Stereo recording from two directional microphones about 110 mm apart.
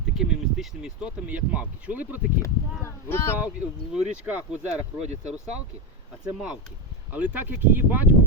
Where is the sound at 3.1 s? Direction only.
20° left (ahead or behind).